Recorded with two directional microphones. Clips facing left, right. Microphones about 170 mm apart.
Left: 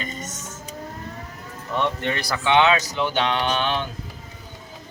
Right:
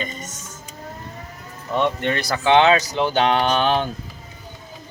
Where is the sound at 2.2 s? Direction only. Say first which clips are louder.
Right 3 dB; 35° right (ahead or behind).